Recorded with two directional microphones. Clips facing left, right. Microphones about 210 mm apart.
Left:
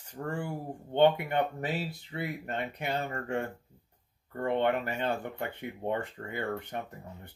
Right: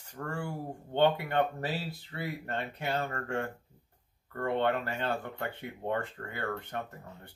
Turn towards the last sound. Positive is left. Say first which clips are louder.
# left 2 dB
turn(degrees=15)  # may be behind; listen again after turning